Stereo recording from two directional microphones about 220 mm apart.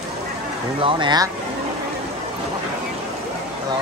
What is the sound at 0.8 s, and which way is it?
Speech, 20° right (ahead or behind).